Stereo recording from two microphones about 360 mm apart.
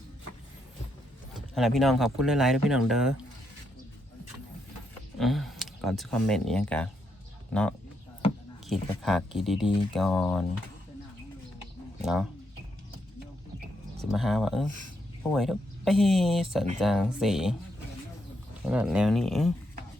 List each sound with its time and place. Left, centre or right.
1.5 s speech: centre
5.2 s speech: centre
8.6 s speech: centre
12.0 s speech: centre
14.1 s speech: centre
14.7 s speech: right
15.3 s speech: centre
18.7 s speech: centre